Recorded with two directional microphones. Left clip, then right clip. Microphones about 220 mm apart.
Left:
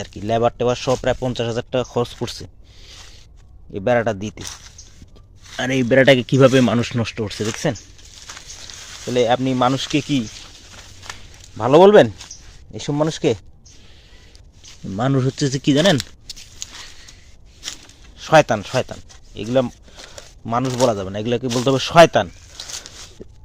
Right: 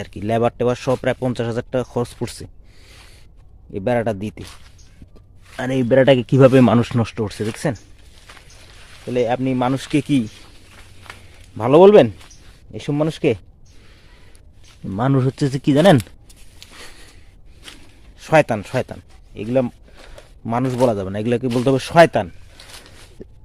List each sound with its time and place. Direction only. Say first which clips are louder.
0.0 s speech: left 1 dB; 25° right (ahead or behind)
5.5 s speech: even; 15° right (ahead or behind)
8.3 s a sound: left 7 dB; 55° left (ahead or behind)
9.0 s speech: left 2 dB; 5° right (ahead or behind); by 10.2 s 25° right (ahead or behind)
11.5 s speech: even; 20° right (ahead or behind)
14.9 s speech: right 1 dB; 15° right (ahead or behind)
16.6 s a sound: left 7 dB; 55° left (ahead or behind)
18.2 s speech: left 2 dB; 20° right (ahead or behind)
20.4 s speech: even; 30° right (ahead or behind)
22.5 s a sound: left 8 dB; 50° left (ahead or behind)